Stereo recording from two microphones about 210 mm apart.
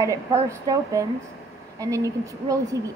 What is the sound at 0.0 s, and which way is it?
A woman's voice, 15° right (ahead or behind).